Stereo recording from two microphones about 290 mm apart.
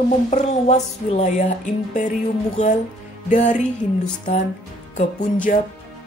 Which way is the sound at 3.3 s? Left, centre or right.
Left.